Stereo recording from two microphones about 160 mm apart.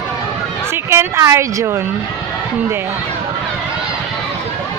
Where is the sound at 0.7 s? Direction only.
15° right (ahead or behind).